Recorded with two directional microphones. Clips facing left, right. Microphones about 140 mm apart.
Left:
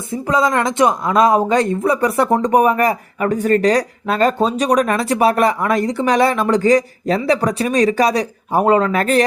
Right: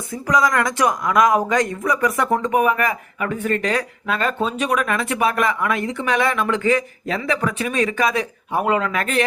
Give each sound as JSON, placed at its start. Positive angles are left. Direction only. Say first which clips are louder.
{"t": 0.1, "sound": "speech", "louder": "left 2 dB", "side_deg": 25}